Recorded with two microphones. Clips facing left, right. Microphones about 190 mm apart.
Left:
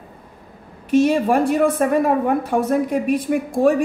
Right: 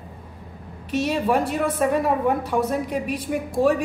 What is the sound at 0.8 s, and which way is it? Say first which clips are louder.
A woman's voice: left 6 dB; 50° left (ahead or behind).